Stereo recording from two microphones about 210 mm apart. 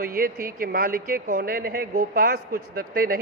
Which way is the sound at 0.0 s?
45° right (ahead or behind).